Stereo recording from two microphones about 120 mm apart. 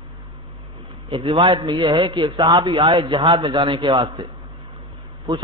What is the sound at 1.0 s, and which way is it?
A man's voice, 35° right (ahead or behind).